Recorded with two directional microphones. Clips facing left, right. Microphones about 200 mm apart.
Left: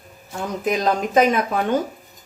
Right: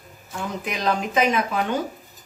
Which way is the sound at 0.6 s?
45° left (ahead or behind).